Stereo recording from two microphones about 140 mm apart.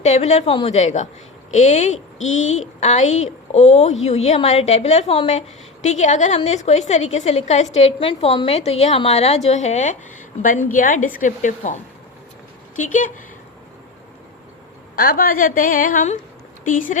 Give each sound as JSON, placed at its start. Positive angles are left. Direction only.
{"t": 0.0, "sound": "a woman's voice", "side_deg": 55}
{"t": 10.4, "sound": "a woman's voice", "side_deg": 75}
{"t": 15.0, "sound": "a woman's voice", "side_deg": 90}
{"t": 16.6, "sound": "a woman's voice", "side_deg": 70}